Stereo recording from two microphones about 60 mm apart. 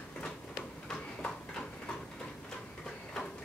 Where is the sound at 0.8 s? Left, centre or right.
Centre.